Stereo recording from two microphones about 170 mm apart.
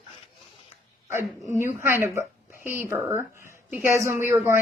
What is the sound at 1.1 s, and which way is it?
A woman's voice, 15° right (ahead or behind).